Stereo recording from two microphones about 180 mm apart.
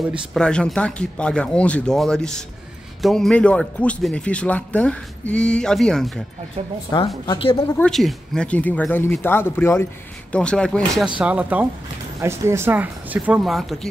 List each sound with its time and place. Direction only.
0.3 s a man's voice: 5° left (ahead or behind)
6.9 s a woman's voice: 20° left (ahead or behind)
7.7 s a man's voice: 5° left (ahead or behind)